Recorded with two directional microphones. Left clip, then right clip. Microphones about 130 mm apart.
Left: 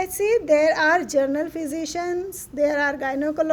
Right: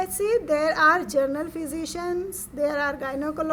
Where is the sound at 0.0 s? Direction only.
30° left (ahead or behind).